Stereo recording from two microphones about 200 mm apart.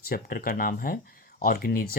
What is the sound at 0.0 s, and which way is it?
Speech, 50° left (ahead or behind).